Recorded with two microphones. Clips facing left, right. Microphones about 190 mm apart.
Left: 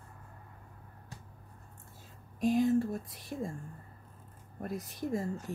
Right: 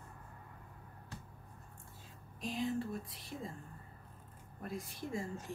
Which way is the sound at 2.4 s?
45° left (ahead or behind).